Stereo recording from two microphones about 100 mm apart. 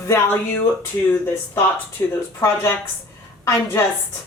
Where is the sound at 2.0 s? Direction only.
30° left (ahead or behind).